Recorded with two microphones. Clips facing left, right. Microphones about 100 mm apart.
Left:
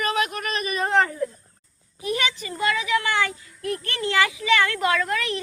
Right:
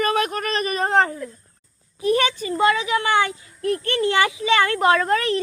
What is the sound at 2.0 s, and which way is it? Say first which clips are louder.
Speech: right 7 dB; 35° right (ahead or behind).